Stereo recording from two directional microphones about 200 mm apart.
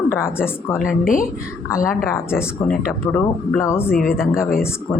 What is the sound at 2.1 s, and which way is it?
Speech, 10° left (ahead or behind).